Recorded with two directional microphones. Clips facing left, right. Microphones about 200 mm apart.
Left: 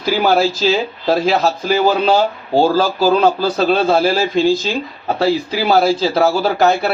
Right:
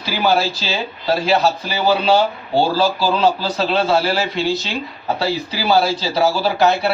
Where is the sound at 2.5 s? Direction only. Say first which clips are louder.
Left 3 dB; 45° left (ahead or behind).